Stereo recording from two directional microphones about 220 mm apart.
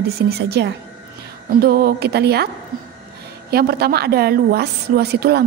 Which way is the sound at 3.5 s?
45° right (ahead or behind).